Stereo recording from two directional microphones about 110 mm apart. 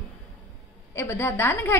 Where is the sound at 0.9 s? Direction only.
25° left (ahead or behind).